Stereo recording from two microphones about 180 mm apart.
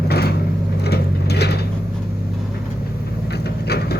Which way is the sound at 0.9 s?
65° left (ahead or behind).